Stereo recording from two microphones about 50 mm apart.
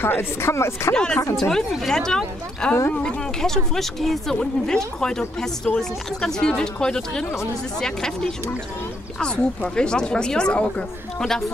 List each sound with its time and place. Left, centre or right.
0.0 s speech: left
0.5 s speech: left
0.9 s a woman's voice: centre